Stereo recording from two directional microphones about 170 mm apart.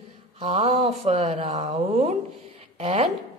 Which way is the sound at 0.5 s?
40° right (ahead or behind).